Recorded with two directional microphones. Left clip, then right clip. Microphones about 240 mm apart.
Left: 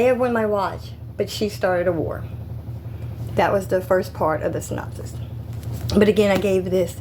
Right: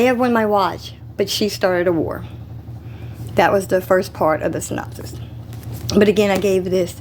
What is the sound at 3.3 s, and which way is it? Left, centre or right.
A woman's voice, right.